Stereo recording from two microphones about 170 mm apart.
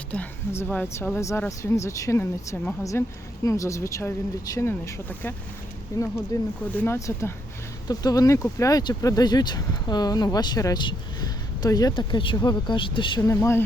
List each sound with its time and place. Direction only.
0.1 s speech: 10° left (ahead or behind)